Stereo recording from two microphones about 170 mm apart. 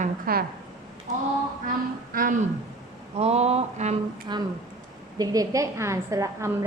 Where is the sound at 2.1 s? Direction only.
55° right (ahead or behind).